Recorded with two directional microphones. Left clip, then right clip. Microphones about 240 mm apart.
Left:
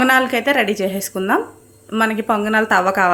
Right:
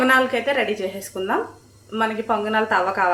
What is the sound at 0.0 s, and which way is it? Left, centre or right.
Dishes, left.